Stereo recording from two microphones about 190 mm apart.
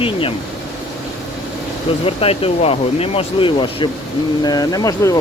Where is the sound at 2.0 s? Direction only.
30° left (ahead or behind).